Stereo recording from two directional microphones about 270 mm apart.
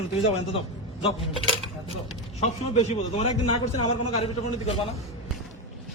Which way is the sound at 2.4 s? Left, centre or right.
Left.